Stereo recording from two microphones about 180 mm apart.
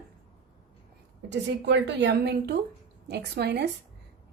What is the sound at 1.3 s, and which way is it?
A woman's voice, 75° right (ahead or behind).